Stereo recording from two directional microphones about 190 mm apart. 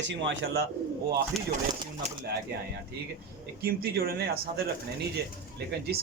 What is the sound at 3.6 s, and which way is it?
Speech, 55° right (ahead or behind).